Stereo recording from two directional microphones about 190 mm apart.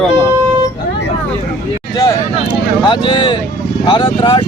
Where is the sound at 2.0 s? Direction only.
20° left (ahead or behind).